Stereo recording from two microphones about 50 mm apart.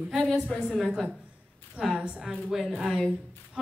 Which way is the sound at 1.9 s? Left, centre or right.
Centre.